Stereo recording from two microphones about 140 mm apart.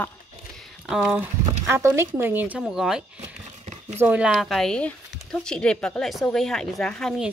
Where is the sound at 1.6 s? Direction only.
15° right (ahead or behind).